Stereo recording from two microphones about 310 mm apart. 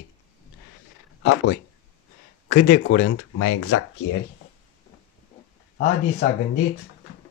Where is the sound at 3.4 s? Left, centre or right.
Left.